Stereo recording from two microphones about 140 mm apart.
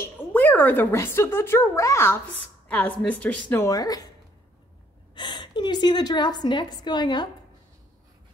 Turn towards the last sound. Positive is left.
turn(degrees=30)  # may be behind; listen again after turning